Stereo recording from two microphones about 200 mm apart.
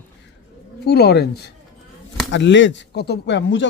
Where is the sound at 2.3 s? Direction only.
65° left (ahead or behind).